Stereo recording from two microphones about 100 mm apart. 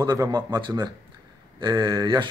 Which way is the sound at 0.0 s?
40° right (ahead or behind).